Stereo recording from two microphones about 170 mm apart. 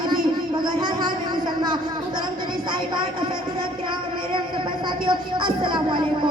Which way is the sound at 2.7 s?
25° right (ahead or behind).